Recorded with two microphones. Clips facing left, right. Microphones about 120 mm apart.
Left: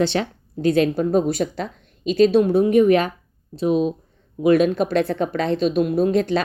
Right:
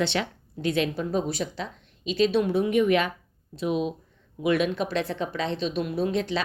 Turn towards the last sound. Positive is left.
turn(degrees=50)  # may be behind; listen again after turning